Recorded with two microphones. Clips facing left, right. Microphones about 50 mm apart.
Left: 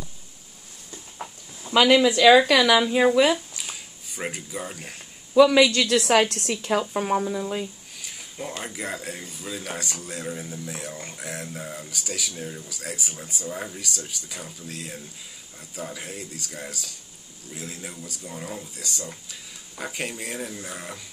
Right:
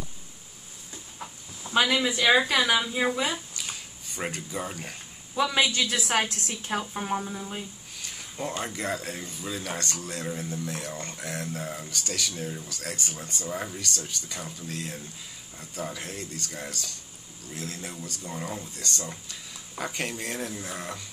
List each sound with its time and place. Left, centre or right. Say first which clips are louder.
1.7 s speech: left 7 dB; left
3.5 s a sound: even; centre
5.3 s a woman's voice: left 9 dB; left
8.0 s a sound: right 1 dB; centre
8.6 s speech: right 1 dB; centre
13.5 s speech: even; centre
13.7 s speech: even; centre